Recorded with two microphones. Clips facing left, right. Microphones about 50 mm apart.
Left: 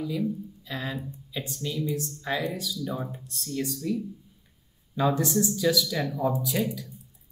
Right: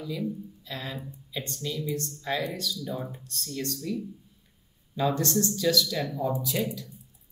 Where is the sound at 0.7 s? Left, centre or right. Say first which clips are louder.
Left 3 dB; centre.